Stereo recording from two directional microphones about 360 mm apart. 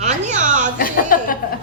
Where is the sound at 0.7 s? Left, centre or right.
Left.